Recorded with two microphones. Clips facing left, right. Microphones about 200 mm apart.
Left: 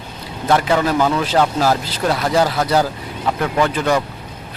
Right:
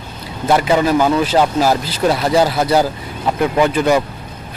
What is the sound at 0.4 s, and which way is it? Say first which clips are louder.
Speech: right 2 dB; 10° right (ahead or behind).